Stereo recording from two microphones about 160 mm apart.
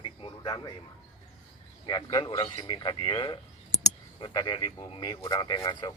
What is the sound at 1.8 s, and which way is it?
Speech, 25° left (ahead or behind).